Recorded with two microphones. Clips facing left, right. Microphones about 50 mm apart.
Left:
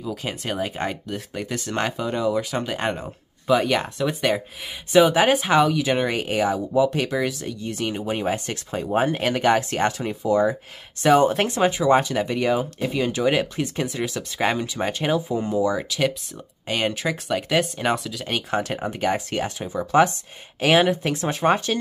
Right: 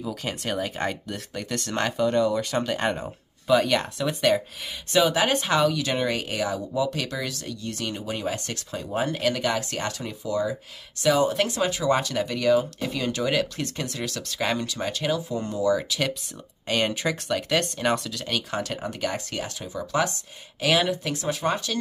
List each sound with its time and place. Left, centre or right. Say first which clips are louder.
0.1 s speech: left 2 dB; centre
5.0 s speech: left 4 dB; left
15.3 s speech: left 6 dB; centre
15.9 s speech: left 4 dB; centre
16.6 s speech: left 1 dB; centre
16.9 s speech: left 1 dB; centre
17.3 s speech: left 4 dB; centre
18.2 s speech: left 4 dB; left